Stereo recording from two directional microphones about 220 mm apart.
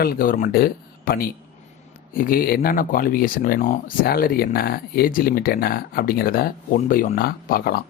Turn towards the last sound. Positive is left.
turn(degrees=45)  # may be behind; listen again after turning